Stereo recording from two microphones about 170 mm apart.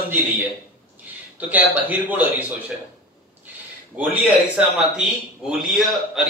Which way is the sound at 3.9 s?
10° right (ahead or behind).